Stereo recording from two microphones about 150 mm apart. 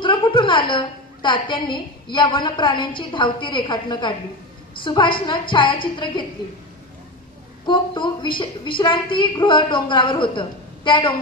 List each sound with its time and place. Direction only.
0.0 s a woman's voice: 35° left (ahead or behind)
7.6 s a woman's voice: 30° left (ahead or behind)